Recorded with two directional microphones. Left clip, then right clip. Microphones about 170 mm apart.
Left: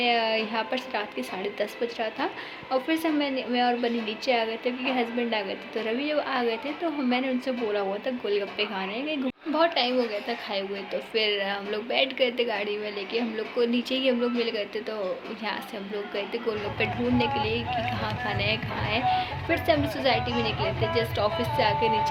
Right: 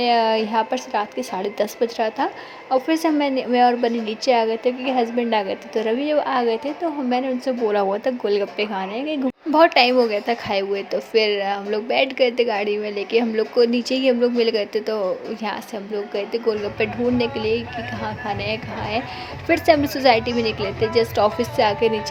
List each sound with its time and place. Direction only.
0.0 s a woman's voice: 40° right (ahead or behind)
16.1 s a woman's voice: 35° right (ahead or behind)